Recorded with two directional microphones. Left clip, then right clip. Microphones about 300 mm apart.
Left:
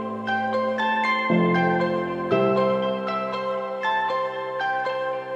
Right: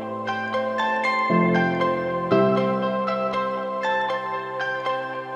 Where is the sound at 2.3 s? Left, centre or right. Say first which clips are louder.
Even; centre.